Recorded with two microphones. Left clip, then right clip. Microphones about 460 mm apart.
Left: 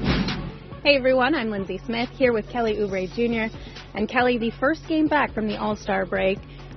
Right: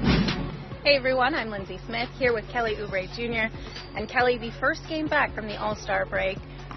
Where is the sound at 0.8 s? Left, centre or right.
Left.